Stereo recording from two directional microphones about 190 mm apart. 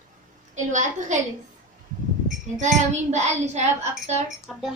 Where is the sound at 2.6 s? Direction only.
35° right (ahead or behind).